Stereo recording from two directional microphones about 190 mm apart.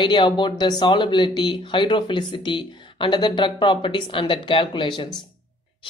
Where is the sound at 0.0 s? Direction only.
25° left (ahead or behind).